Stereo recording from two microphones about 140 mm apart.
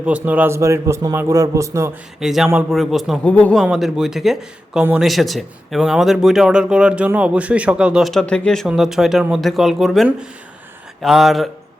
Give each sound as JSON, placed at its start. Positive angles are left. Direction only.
{"t": 0.0, "sound": "a man's voice", "side_deg": -10}
{"t": 2.2, "sound": "speech", "side_deg": -5}